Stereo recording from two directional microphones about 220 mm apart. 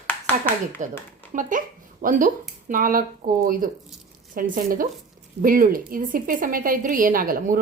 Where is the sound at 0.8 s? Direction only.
35° right (ahead or behind).